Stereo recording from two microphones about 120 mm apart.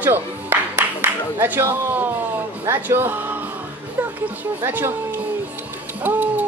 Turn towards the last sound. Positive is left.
turn(degrees=-15)  # may be behind; listen again after turning